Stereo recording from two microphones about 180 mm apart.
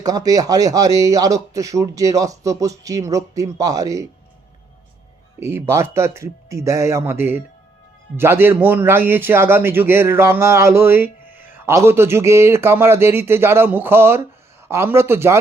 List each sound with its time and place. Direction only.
0.0 s speech: 20° right (ahead or behind)
5.4 s a man's voice: 15° right (ahead or behind)